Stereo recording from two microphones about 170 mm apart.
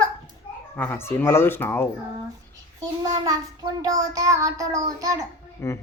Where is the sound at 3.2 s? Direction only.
20° right (ahead or behind).